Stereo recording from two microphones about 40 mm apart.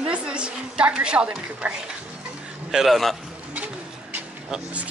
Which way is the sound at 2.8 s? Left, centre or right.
Centre.